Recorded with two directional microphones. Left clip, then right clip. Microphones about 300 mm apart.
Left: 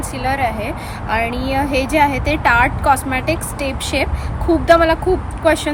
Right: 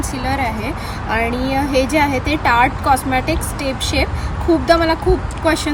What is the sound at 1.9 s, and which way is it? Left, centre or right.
A woman's voice, centre.